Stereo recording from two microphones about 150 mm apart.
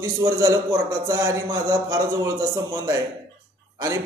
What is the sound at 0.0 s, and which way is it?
A man's voice, 20° right (ahead or behind).